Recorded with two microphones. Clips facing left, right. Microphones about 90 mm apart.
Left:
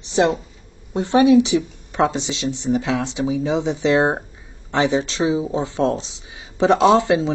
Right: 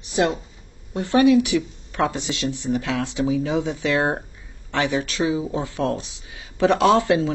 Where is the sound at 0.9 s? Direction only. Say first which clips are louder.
Left 2 dB; 20° left (ahead or behind).